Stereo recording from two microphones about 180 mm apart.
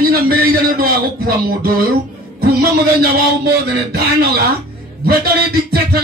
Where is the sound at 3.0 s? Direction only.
60° right (ahead or behind).